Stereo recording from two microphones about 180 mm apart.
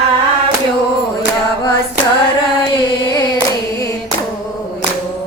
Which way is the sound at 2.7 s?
20° left (ahead or behind).